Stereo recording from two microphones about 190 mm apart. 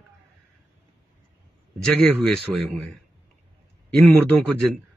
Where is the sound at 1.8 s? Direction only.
5° left (ahead or behind).